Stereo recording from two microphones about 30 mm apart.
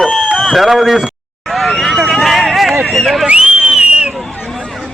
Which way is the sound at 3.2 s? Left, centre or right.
Right.